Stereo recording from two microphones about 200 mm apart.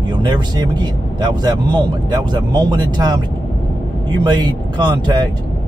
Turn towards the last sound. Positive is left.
turn(degrees=-20)  # may be behind; listen again after turning